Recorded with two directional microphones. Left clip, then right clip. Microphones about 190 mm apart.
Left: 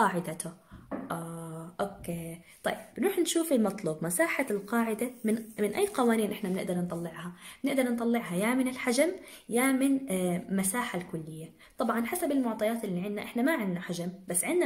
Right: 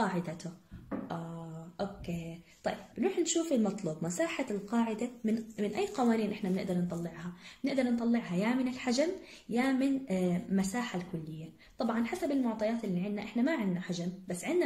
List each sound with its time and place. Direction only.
0.0 s a woman's voice: 30° left (ahead or behind)
2.6 s a woman's voice: 30° left (ahead or behind)